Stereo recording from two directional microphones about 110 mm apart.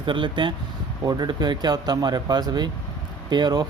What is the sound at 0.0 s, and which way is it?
Speech, 45° right (ahead or behind).